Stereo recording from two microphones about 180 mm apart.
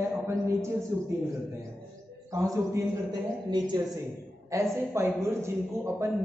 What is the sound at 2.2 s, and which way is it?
A man's voice, 15° right (ahead or behind).